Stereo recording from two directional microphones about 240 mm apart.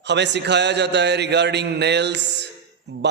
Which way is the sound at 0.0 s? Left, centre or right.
Right.